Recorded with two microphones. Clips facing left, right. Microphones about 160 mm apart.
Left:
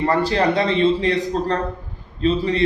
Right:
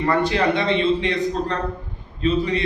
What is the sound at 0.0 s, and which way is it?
A man's voice, 30° left (ahead or behind).